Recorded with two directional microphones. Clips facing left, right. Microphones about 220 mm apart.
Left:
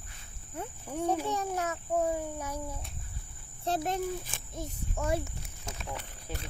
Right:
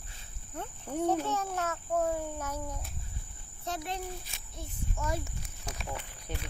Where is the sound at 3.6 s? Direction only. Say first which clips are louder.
Left 6 dB; 40° left (ahead or behind).